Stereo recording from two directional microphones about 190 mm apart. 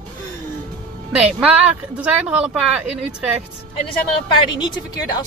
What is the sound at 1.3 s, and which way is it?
Speech, 5° right (ahead or behind).